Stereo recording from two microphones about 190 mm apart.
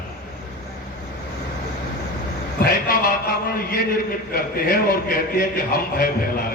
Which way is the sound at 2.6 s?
50° left (ahead or behind).